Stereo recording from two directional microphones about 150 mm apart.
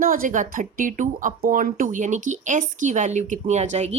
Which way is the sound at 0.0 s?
70° right (ahead or behind).